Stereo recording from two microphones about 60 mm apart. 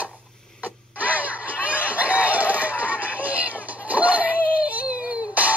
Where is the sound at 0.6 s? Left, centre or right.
Right.